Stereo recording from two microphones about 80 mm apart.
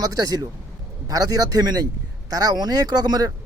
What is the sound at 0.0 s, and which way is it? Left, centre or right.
Speech, right.